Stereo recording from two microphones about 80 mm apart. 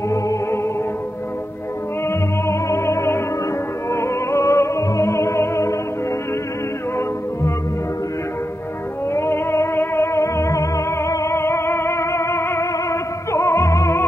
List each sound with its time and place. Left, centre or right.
0.1 s music: left
2.0 s music: left
9.1 s music: left